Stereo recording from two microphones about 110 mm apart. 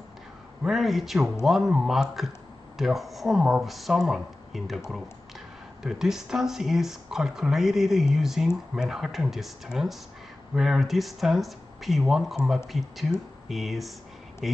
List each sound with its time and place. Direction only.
0.7 s speech: centre (ahead or behind)